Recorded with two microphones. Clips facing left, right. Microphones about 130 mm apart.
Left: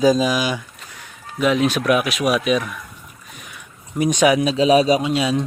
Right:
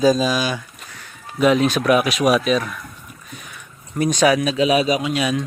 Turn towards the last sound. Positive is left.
turn(degrees=25)  # may be behind; listen again after turning